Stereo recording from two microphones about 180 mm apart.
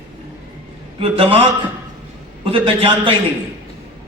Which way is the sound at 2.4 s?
30° right (ahead or behind).